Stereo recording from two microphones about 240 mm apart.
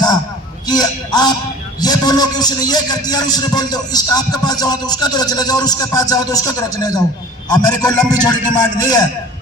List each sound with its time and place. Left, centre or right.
0.7 s speech: centre